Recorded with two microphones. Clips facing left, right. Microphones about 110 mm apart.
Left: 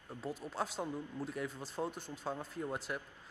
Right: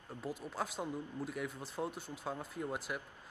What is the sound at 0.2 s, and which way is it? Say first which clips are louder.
Speech: left 1 dB; centre (ahead or behind).